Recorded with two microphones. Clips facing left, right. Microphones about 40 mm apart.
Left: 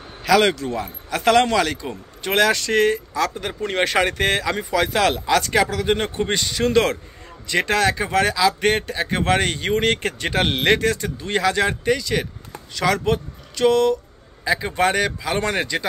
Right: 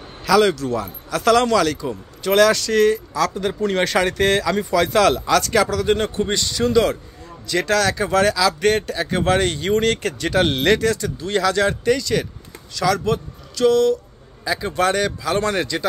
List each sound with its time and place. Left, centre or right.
0.2 s a man's voice: left
6.6 s a man's voice: left
7.4 s a man's voice: left
12.7 s a man's voice: left